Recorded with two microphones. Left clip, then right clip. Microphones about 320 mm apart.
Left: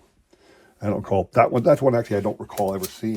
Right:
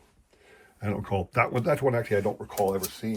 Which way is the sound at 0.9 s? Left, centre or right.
Centre.